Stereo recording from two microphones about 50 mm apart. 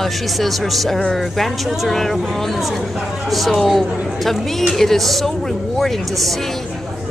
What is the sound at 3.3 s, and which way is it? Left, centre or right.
A woman's voice, centre.